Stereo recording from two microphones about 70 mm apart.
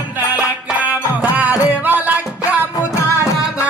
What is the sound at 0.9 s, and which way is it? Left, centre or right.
Music, right.